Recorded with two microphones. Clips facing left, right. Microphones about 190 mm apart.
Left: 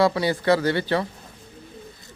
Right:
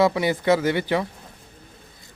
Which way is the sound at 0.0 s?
20° right (ahead or behind).